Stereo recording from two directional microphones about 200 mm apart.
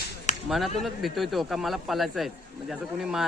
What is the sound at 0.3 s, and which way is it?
Whip, 35° left (ahead or behind).